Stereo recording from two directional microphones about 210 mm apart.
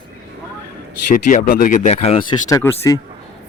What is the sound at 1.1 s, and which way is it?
Speech, 40° left (ahead or behind).